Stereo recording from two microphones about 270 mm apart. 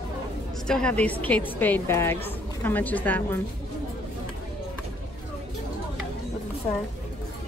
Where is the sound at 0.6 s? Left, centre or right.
Centre.